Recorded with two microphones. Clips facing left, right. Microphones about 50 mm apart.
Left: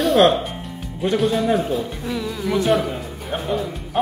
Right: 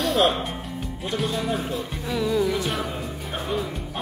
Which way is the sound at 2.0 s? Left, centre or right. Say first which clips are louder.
Right 3 dB; centre.